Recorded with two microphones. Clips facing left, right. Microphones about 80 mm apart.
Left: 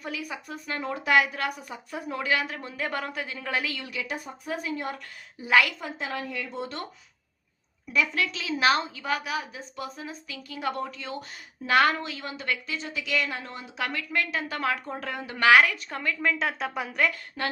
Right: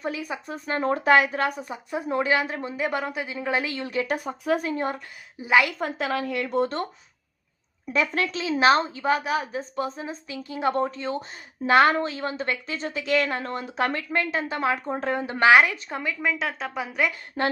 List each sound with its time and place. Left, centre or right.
0.0 s speech: right
4.0 s speech: right
4.6 s a woman's voice: right
5.4 s speech: right
6.0 s a woman's voice: right
7.9 s a woman's voice: right; by 16.4 s centre
16.4 s a woman's voice: centre
17.1 s speech: right